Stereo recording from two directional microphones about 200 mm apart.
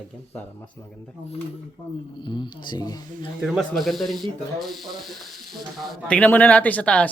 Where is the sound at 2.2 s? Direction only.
20° left (ahead or behind).